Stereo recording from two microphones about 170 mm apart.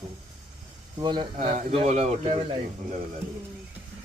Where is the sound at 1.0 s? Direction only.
25° right (ahead or behind).